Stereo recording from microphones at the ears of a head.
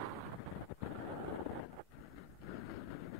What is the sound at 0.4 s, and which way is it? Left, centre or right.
Wind noise, left.